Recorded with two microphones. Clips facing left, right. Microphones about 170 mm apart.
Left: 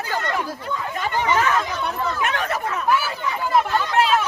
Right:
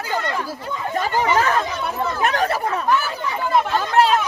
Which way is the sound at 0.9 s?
35° right (ahead or behind).